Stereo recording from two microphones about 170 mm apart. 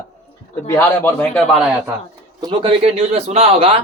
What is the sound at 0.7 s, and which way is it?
Speech, 10° left (ahead or behind).